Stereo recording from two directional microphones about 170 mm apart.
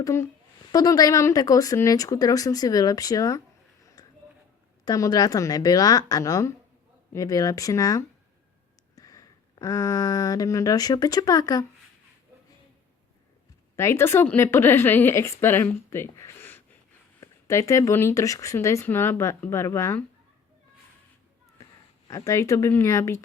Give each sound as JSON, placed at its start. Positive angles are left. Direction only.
{"t": 0.0, "sound": "a woman's voice", "side_deg": 15}
{"t": 4.9, "sound": "speech", "side_deg": 20}
{"t": 13.7, "sound": "a woman's voice", "side_deg": 15}
{"t": 21.6, "sound": "speech", "side_deg": 20}